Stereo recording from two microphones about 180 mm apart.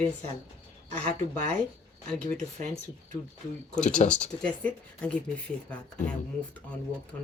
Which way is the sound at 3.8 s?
40° left (ahead or behind).